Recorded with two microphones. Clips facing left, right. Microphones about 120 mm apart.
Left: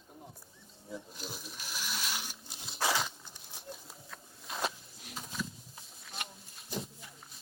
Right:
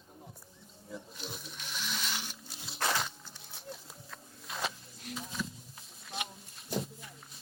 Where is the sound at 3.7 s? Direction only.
Centre (ahead or behind).